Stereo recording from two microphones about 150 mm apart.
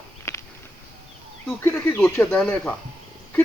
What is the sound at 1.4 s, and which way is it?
Speech, 15° left (ahead or behind).